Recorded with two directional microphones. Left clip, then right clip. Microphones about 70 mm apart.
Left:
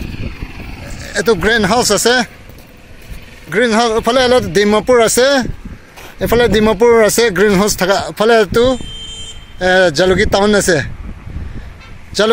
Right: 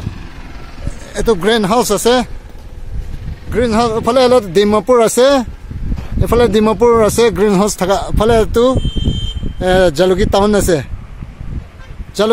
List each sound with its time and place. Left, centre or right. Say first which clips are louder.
0.1 s vehicle: left 5 dB; right
0.8 s vehicle: left 1 dB; right
1.4 s speech: even; centre
3.5 s speech: left 2 dB; centre
5.2 s speech: right 1 dB; centre
6.3 s speech: even; centre
7.4 s speech: left 1 dB; right
9.6 s speech: left 1 dB; centre
12.2 s speech: left 1 dB; centre